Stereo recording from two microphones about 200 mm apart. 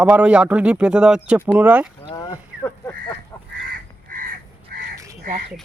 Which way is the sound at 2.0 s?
25° left (ahead or behind).